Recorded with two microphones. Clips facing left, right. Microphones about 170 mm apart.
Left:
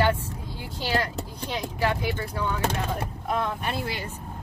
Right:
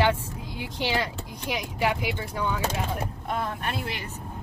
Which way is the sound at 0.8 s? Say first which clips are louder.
Left 1 dB; 15° right (ahead or behind).